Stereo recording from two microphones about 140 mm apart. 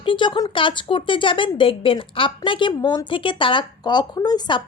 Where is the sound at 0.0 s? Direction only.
35° left (ahead or behind).